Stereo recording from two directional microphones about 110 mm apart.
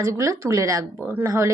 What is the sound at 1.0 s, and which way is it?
Speech, 15° right (ahead or behind).